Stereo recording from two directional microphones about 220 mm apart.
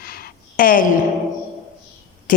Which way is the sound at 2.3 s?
40° left (ahead or behind).